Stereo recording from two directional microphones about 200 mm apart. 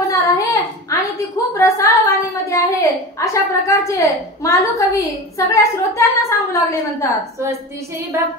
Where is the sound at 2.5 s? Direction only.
15° left (ahead or behind).